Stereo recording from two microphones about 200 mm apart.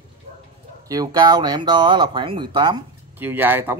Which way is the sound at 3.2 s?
10° right (ahead or behind).